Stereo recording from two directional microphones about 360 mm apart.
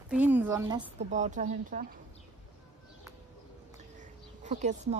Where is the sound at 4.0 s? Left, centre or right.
Centre.